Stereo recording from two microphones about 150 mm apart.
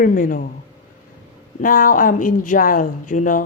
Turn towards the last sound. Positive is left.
turn(degrees=60)  # may be behind; listen again after turning